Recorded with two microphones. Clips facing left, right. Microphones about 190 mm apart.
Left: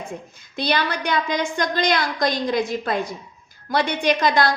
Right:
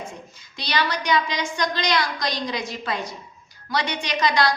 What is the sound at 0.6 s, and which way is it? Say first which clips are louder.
A woman's voice: left 3 dB; 55° left (ahead or behind).